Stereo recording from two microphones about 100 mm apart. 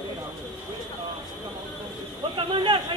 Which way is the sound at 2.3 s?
60° right (ahead or behind).